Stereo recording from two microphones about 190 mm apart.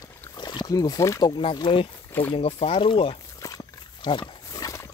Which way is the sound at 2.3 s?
30° left (ahead or behind).